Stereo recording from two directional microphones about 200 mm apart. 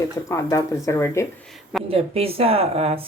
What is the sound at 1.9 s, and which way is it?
A woman's voice, 30° right (ahead or behind).